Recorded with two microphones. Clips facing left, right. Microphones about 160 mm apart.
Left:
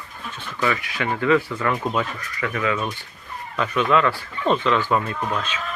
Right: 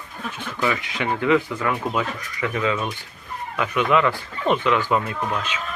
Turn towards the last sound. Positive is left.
turn(degrees=-15)  # may be behind; listen again after turning